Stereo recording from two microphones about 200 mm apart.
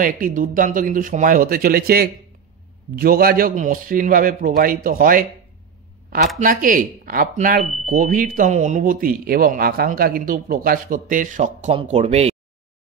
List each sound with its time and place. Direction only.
0.0 s speech: 45° right (ahead or behind)
6.4 s speech: 40° right (ahead or behind)